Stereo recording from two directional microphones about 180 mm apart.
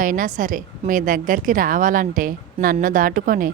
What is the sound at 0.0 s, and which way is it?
A woman's voice, 50° right (ahead or behind).